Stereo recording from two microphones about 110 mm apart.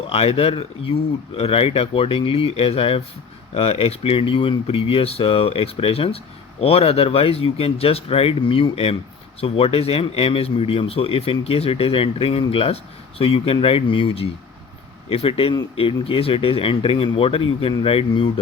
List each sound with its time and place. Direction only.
0.1 s speech: 65° left (ahead or behind)